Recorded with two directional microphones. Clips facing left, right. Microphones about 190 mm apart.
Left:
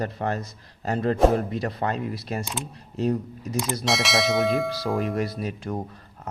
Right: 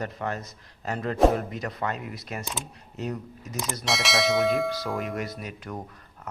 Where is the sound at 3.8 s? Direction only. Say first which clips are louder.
Left 1 dB; centre (ahead or behind).